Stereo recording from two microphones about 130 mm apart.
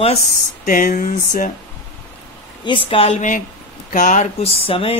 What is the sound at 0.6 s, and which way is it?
Speech, 90° left.